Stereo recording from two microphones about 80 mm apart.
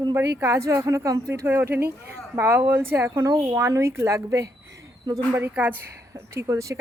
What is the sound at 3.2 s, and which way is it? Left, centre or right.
Speech, right.